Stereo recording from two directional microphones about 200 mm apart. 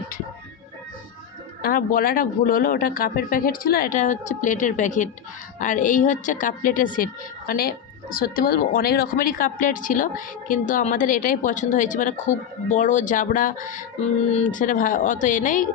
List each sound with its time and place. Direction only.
1.6 s speech: 45° left (ahead or behind)